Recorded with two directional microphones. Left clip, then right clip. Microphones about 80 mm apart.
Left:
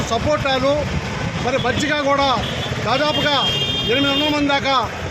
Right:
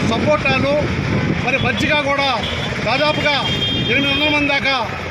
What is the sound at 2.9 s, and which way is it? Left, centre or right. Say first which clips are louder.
Speech: right 1 dB; left.